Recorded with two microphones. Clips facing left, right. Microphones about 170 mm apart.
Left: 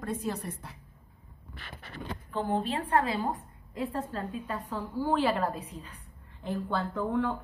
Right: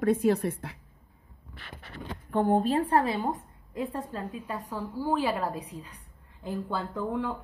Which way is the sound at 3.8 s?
20° right (ahead or behind).